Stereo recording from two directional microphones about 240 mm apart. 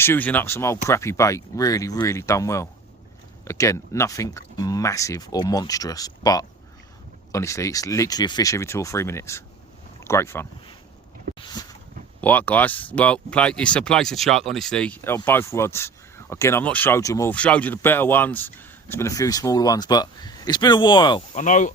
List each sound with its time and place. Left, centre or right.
0.0 s speech: centre
11.3 s a sound: centre
12.2 s speech: centre
21.3 s speech: left